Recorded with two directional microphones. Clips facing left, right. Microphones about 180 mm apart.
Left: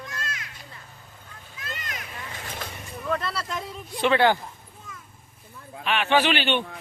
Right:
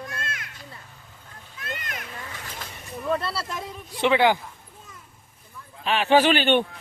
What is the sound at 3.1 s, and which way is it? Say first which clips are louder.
Speech: right 2 dB; 30° right (ahead or behind).